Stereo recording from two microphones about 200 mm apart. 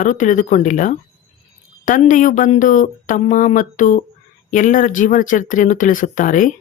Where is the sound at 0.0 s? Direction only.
40° left (ahead or behind).